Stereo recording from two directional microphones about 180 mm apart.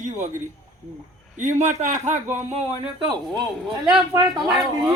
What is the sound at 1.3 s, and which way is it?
Speech, 40° right (ahead or behind).